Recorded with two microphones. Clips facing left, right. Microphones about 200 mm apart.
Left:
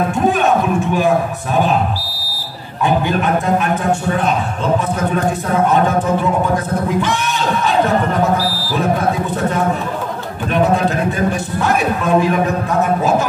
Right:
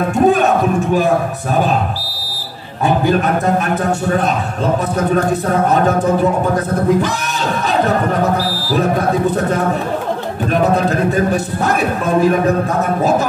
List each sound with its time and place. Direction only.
2.8 s a man's voice: 40° right (ahead or behind)
7.6 s a man's voice: 40° right (ahead or behind)
10.5 s a man's voice: 40° right (ahead or behind)
12.2 s a man's voice: 40° right (ahead or behind)